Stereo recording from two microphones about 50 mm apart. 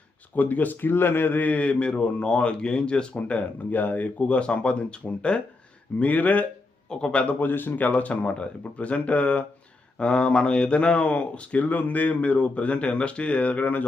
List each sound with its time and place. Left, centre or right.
0.3 s speech: left
6.8 s a man's voice: centre
7.2 s speech: left